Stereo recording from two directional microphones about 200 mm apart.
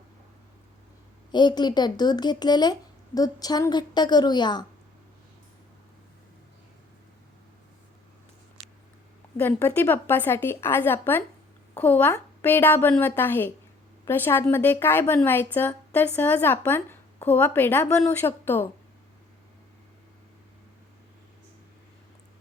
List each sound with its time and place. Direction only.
1.3 s speech: 20° left (ahead or behind)
9.4 s a woman's voice: 10° left (ahead or behind)